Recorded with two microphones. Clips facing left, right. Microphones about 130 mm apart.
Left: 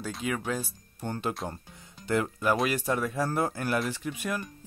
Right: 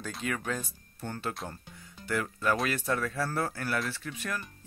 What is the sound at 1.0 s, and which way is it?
Speech, 20° left (ahead or behind).